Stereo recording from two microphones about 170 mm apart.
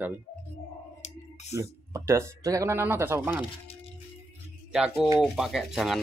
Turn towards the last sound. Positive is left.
turn(degrees=0)  # may be behind; listen again after turning